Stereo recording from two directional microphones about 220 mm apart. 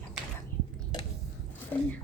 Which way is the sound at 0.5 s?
10° left (ahead or behind).